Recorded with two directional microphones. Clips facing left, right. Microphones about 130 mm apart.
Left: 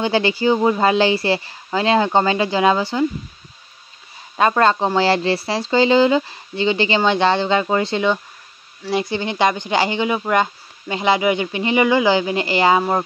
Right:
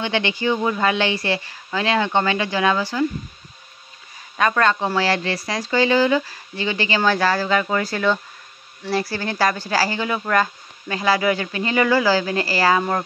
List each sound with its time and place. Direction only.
0.0 s speech: 35° left (ahead or behind)
4.4 s speech: 30° left (ahead or behind)